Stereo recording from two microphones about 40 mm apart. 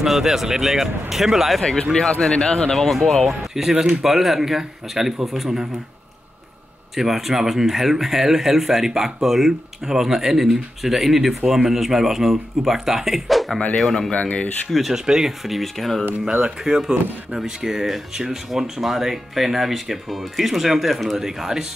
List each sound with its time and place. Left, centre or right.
0.0 s speech: centre
1.6 s speech: centre
2.3 s speech: left; by 3.2 s centre
3.3 s speech: centre
7.0 s speech: centre
14.1 s speech: left
14.9 s speech: centre
15.4 s speech: centre
16.3 s speech: centre
21.2 s speech: centre